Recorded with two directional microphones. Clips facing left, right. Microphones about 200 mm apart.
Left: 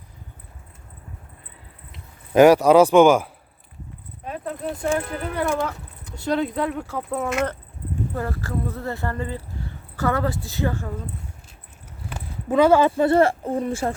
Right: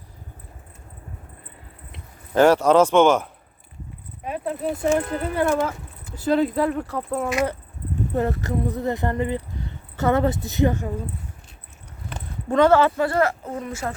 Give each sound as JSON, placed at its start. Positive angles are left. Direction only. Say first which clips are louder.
{"t": 2.3, "sound": "speech", "louder": "left 3 dB", "side_deg": 15}
{"t": 4.3, "sound": "speech", "louder": "right 3 dB", "side_deg": -5}
{"t": 8.1, "sound": "speech", "louder": "right 7 dB", "side_deg": -20}
{"t": 12.0, "sound": "a sound", "louder": "even", "side_deg": 5}
{"t": 12.9, "sound": "speech", "louder": "left 4 dB", "side_deg": 25}